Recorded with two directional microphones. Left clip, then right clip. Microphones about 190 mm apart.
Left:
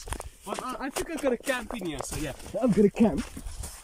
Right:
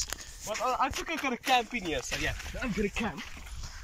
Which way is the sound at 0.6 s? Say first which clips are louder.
Right 10 dB; centre (ahead or behind).